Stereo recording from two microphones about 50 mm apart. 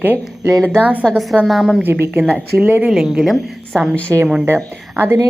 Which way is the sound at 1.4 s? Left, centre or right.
Centre.